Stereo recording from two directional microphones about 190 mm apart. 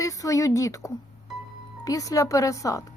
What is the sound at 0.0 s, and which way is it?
A woman's voice, 15° left (ahead or behind).